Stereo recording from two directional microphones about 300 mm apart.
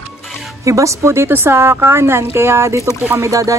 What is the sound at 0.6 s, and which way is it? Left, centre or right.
A woman's voice, centre.